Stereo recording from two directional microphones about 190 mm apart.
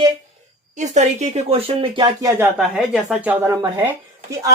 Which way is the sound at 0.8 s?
40° right (ahead or behind).